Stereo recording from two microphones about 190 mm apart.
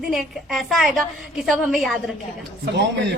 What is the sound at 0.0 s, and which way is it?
A woman's voice, centre (ahead or behind).